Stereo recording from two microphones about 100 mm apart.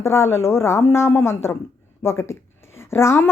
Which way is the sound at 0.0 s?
25° left (ahead or behind).